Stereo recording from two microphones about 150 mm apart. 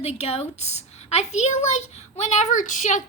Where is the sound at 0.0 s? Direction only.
45° left (ahead or behind).